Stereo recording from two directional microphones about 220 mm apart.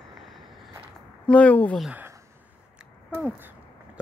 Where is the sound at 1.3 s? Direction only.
5° left (ahead or behind).